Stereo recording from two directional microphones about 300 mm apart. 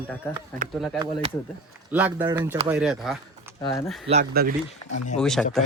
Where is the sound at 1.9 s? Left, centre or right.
Centre.